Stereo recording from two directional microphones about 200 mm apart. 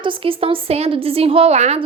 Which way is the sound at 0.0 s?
25° right (ahead or behind).